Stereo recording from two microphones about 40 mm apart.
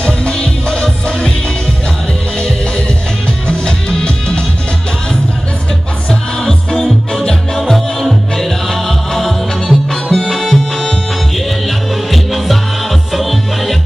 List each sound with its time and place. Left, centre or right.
0.0 s music: left
0.8 s music: centre
3.4 s music: left
6.0 s music: centre